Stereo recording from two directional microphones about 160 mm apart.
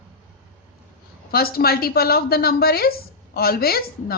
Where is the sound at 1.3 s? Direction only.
70° left (ahead or behind).